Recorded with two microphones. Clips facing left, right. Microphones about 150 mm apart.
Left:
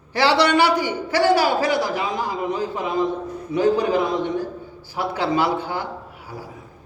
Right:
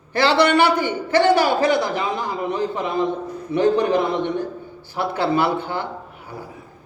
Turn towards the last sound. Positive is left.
turn(degrees=-30)  # may be behind; listen again after turning